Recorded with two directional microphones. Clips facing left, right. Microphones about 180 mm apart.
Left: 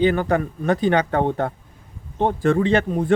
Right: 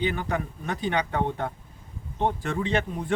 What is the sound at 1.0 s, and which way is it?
Speech, 45° left (ahead or behind).